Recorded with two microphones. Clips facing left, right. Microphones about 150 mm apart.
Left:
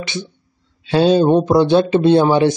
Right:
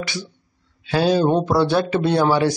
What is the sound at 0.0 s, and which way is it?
Speech, 20° left (ahead or behind).